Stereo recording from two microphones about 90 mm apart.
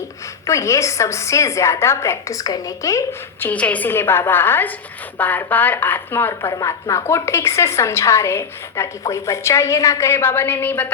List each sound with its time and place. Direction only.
0.4 s a woman's voice: 35° left (ahead or behind)
3.4 s speech: 15° left (ahead or behind)
6.5 s a woman's voice: 40° left (ahead or behind); by 10.9 s 20° left (ahead or behind)